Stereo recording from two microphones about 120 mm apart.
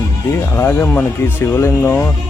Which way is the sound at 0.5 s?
20° left (ahead or behind).